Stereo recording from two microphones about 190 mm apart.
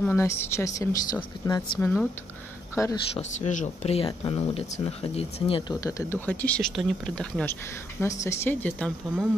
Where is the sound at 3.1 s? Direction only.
35° left (ahead or behind).